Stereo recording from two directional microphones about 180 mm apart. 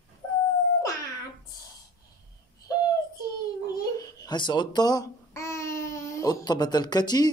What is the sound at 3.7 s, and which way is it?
Babbling, 20° left (ahead or behind).